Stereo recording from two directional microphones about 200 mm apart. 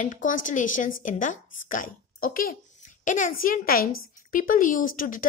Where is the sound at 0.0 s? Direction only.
40° left (ahead or behind).